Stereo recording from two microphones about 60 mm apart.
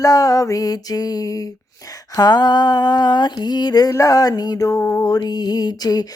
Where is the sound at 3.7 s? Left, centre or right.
Left.